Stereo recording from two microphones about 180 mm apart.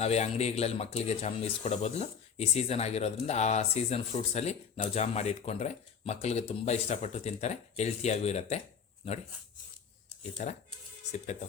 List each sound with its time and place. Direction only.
0.0 s speech: 35° left (ahead or behind)
10.4 s speech: 40° left (ahead or behind)